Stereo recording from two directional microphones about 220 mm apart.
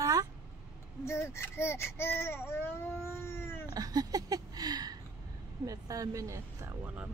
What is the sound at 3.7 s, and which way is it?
Speech, 15° right (ahead or behind).